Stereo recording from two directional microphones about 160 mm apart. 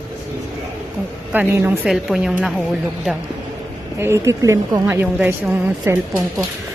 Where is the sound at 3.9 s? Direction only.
15° right (ahead or behind).